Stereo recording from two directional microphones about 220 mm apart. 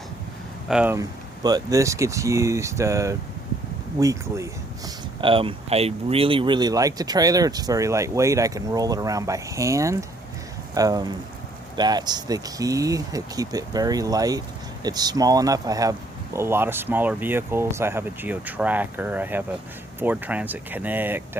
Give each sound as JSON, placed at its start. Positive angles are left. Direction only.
{"t": 0.7, "sound": "speech", "side_deg": -5}